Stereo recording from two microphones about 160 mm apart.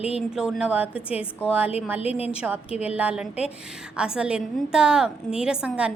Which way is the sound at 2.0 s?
40° left (ahead or behind).